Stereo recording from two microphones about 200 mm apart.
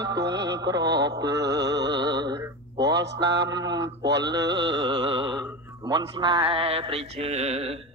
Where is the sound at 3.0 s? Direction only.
60° right (ahead or behind).